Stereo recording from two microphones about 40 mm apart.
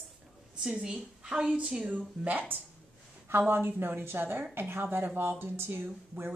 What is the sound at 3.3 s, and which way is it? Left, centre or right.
Speech, right.